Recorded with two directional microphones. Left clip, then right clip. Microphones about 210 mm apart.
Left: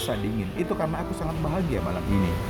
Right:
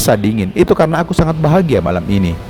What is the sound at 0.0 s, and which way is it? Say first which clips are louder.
Speech: right 15 dB; 50° right (ahead or behind).